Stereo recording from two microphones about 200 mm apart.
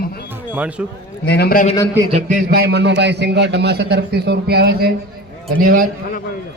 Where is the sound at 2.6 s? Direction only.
55° right (ahead or behind).